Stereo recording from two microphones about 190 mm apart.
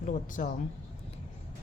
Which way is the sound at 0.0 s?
40° left (ahead or behind).